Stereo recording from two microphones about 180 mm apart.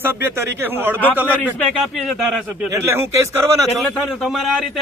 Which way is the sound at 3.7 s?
Centre (ahead or behind).